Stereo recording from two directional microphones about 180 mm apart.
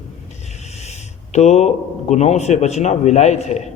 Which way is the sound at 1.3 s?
40° left (ahead or behind).